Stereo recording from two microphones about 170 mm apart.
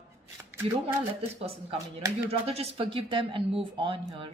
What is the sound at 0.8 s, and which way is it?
Speech, 35° right (ahead or behind).